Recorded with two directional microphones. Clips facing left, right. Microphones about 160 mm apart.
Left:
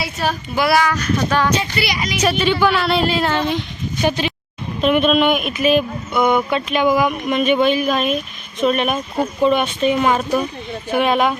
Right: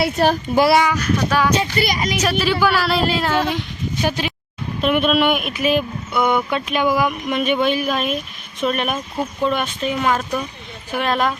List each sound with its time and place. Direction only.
0.0 s a child's voice: 55° right (ahead or behind)
0.6 s speech: 25° right (ahead or behind)
0.9 s speech: 5° right (ahead or behind)
1.8 s a child's voice: 45° right (ahead or behind)
2.2 s speech: 5° right (ahead or behind)
6.9 s speech: 10° left (ahead or behind)
7.6 s speech: 5° right (ahead or behind)
9.4 s speech: 15° left (ahead or behind)